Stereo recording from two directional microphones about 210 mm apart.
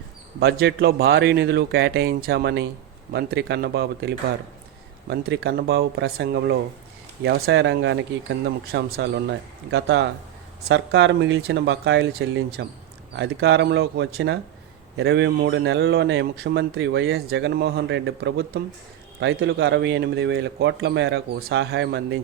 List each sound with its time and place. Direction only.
0.3 s a man's voice: 50° right (ahead or behind)